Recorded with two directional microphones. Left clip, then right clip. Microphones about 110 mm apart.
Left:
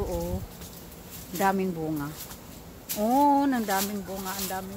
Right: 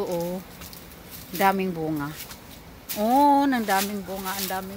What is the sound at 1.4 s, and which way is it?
Speech, 5° right (ahead or behind).